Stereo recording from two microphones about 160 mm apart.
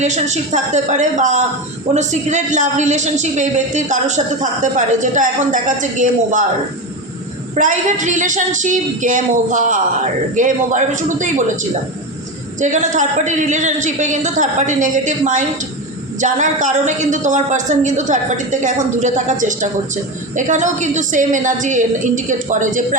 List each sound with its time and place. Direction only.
0.0 s a woman's voice: 45° right (ahead or behind)
7.5 s a woman's voice: 50° right (ahead or behind)
12.5 s a woman's voice: 50° right (ahead or behind)